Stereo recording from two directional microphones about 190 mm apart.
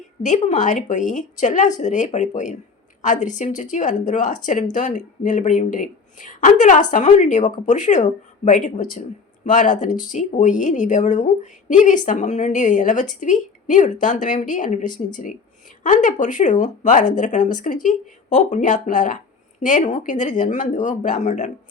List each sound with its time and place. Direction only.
0.2 s speech: 40° left (ahead or behind)